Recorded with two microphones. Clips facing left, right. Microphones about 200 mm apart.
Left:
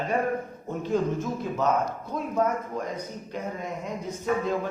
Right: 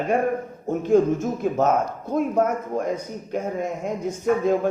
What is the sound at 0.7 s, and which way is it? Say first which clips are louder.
Speech: right 8 dB; 50° right (ahead or behind).